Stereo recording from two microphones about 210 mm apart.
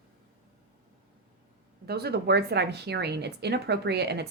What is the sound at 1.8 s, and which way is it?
A woman's voice, 50° right (ahead or behind).